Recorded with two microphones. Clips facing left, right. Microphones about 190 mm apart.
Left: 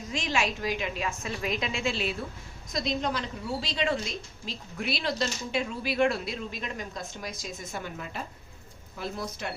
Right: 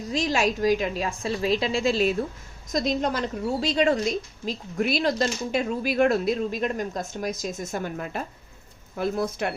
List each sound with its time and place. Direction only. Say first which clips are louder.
0.1 s a woman's voice: right 6 dB; 35° right (ahead or behind); by 9.5 s 55° right (ahead or behind)